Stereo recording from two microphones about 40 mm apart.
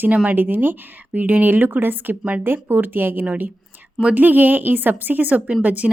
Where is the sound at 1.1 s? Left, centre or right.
Right.